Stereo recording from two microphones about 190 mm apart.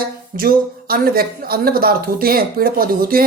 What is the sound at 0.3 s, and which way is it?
Speech, 50° right (ahead or behind).